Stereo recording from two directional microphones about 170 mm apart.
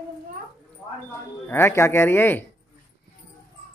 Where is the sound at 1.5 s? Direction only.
15° left (ahead or behind).